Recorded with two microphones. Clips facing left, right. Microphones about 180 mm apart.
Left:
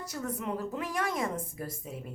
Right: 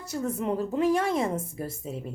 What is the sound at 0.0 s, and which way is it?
A woman's voice, 25° right (ahead or behind).